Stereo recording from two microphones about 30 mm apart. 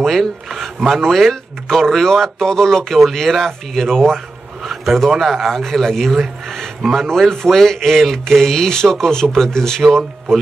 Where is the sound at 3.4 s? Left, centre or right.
Centre.